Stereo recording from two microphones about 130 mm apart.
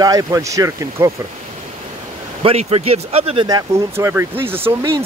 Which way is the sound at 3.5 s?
25° right (ahead or behind).